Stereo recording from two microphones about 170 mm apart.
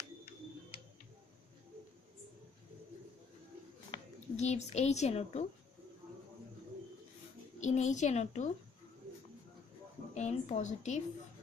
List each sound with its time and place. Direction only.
4.4 s a woman's voice: 40° left (ahead or behind)
7.6 s a woman's voice: 45° left (ahead or behind)
10.1 s a woman's voice: 40° left (ahead or behind)